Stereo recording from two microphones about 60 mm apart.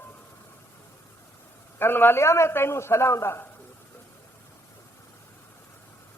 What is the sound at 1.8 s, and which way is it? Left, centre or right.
Speech, left.